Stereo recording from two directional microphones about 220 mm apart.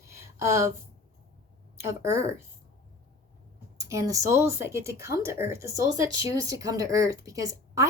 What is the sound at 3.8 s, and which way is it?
Speech, 15° right (ahead or behind).